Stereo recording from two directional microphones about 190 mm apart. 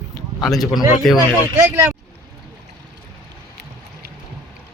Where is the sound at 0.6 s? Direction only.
20° left (ahead or behind).